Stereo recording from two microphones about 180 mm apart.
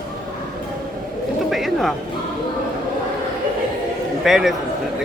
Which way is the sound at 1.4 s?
Centre (ahead or behind).